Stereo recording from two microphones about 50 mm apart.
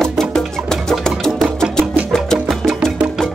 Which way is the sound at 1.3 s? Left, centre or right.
Centre.